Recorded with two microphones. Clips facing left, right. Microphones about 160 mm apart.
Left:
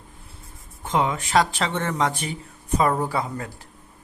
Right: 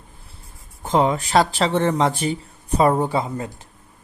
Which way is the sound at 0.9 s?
35° right (ahead or behind).